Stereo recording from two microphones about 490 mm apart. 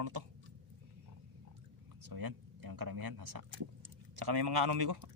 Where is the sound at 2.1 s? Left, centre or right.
Right.